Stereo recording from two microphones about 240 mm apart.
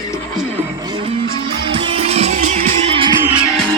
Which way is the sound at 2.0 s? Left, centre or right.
Right.